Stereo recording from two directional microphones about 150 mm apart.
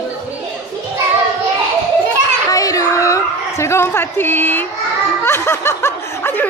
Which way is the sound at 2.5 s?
20° left (ahead or behind).